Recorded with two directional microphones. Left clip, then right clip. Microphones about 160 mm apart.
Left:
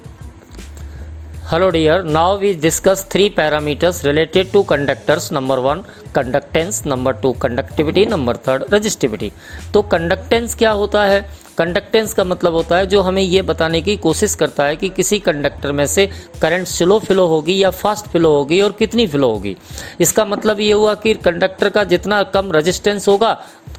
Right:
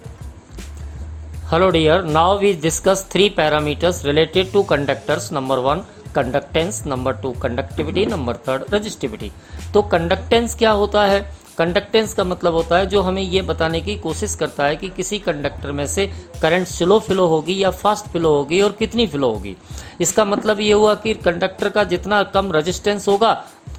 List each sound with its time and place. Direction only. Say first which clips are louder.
1.5 s speech: left 1 dB; 25° left (ahead or behind)